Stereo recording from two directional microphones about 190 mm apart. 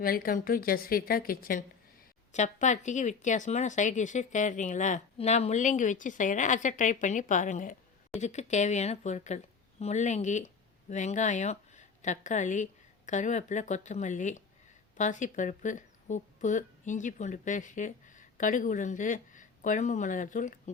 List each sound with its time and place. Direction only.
0.0 s a woman's voice: 50° left (ahead or behind)
2.3 s speech: 40° left (ahead or behind)